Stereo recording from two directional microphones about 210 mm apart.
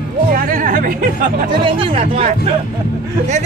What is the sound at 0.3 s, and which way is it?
Music, 45° right (ahead or behind).